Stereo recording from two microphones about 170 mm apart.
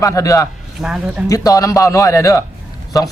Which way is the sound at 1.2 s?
20° left (ahead or behind).